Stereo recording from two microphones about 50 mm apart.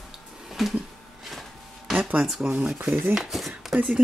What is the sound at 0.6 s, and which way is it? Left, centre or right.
Speech, centre.